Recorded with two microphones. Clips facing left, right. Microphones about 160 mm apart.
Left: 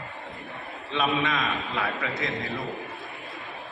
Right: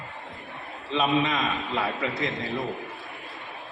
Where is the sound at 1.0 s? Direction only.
35° right (ahead or behind).